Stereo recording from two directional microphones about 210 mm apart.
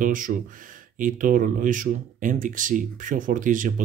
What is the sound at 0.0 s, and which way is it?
Speech, 40° right (ahead or behind).